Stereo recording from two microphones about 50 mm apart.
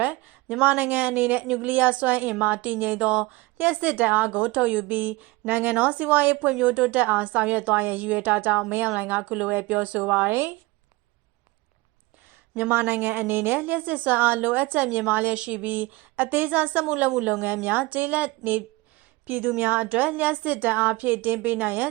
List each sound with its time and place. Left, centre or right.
0.0 s a sound: right
0.6 s a woman's voice: right
1.5 s a woman's voice: right
3.0 s speech: right
3.6 s a woman's voice: right
10.2 s speech: right
12.9 s a woman's voice: right
17.4 s a woman's voice: right